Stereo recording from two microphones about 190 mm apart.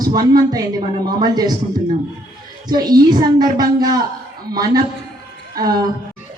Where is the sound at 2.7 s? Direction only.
20° right (ahead or behind).